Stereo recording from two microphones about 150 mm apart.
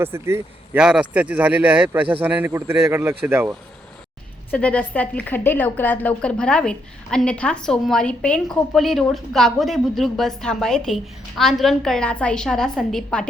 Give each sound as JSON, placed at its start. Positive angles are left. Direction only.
{"t": 0.0, "sound": "speech", "side_deg": -15}
{"t": 4.5, "sound": "a woman's voice", "side_deg": 10}